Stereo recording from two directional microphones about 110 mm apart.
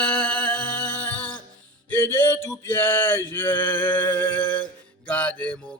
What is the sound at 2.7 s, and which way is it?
Male singing, 20° left (ahead or behind).